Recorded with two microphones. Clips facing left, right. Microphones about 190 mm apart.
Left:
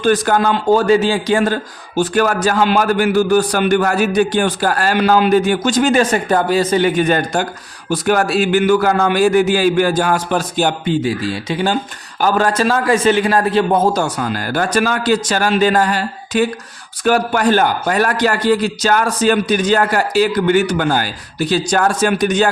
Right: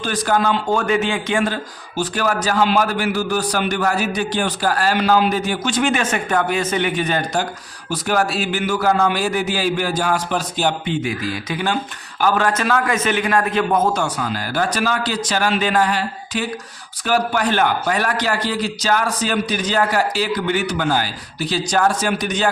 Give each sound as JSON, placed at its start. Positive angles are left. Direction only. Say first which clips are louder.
{"t": 0.0, "sound": "a man's voice", "louder": "left 5 dB", "side_deg": 50}
{"t": 0.7, "sound": "a man's voice", "louder": "left 10 dB", "side_deg": 35}
{"t": 2.0, "sound": "a man's voice", "louder": "left 6 dB", "side_deg": 50}
{"t": 10.9, "sound": "a man's voice", "louder": "left 5 dB", "side_deg": 30}